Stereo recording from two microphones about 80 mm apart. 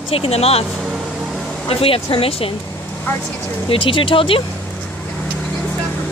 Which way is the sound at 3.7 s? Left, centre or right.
Left.